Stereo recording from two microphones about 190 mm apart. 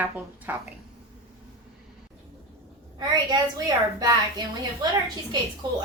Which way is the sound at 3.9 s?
20° right (ahead or behind).